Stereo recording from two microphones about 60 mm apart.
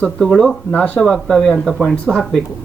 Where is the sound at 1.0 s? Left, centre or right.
Centre.